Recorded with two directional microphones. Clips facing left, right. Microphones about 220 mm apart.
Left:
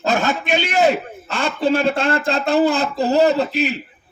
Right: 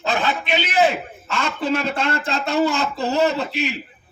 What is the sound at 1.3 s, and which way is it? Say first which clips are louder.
A man's voice: left 4 dB; 35° left (ahead or behind).